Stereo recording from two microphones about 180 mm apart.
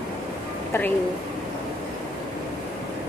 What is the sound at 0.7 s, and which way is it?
Speech, 10° left (ahead or behind).